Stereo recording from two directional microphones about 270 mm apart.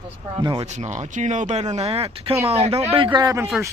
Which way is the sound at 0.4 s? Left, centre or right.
Centre.